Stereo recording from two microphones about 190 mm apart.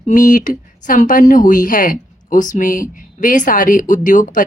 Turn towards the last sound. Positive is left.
turn(degrees=45)  # may be behind; listen again after turning